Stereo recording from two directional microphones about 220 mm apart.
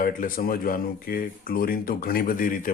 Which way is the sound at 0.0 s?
40° left (ahead or behind).